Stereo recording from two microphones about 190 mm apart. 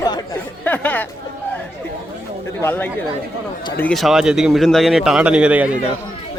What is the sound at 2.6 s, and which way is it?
A man's voice, 10° left (ahead or behind).